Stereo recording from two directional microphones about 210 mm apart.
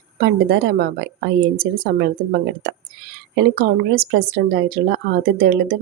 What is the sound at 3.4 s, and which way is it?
Speech, 50° right (ahead or behind).